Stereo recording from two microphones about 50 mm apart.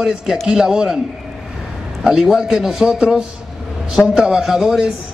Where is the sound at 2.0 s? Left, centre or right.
Centre.